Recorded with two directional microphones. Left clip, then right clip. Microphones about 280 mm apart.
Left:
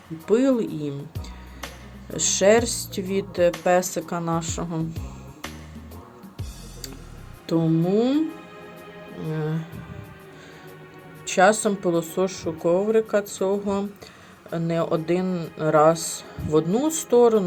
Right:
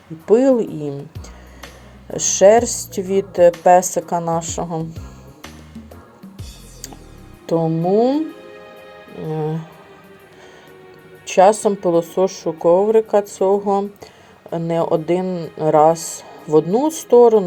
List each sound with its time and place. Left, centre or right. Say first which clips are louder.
0.3 s a woman's voice: right 7 dB; centre
2.0 s a woman's voice: right 7 dB; centre
7.4 s a woman's voice: right 5 dB; centre
9.2 s a woman's voice: right 7 dB; centre
11.3 s a woman's voice: right 6 dB; centre